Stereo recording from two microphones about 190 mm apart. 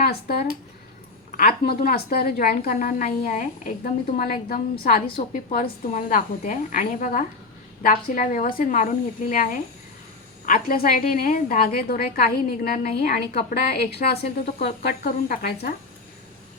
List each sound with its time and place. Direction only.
0.0 s speech: 55° left (ahead or behind)
1.4 s a woman's voice: 50° left (ahead or behind)